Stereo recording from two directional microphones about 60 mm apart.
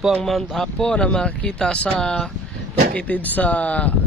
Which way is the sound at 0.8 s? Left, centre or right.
Centre.